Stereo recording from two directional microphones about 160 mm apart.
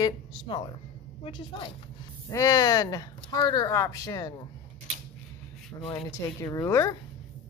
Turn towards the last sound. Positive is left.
turn(degrees=20)  # may be behind; listen again after turning